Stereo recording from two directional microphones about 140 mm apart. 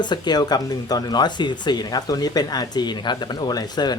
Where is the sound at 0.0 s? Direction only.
30° left (ahead or behind).